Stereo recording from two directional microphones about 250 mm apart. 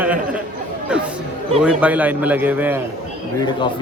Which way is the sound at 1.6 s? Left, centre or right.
Centre.